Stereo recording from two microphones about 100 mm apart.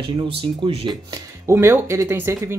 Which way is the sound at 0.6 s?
60° right (ahead or behind).